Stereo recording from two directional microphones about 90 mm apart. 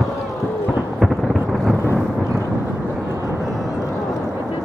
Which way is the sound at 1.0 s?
Centre (ahead or behind).